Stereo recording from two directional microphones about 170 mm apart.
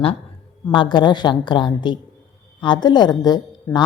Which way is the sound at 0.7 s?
30° left (ahead or behind).